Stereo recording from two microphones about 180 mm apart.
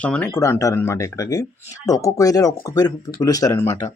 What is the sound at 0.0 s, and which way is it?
A man's voice, 5° left (ahead or behind).